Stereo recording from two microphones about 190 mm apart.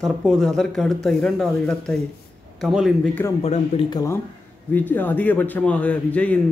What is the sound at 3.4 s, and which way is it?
Speech, 30° left (ahead or behind).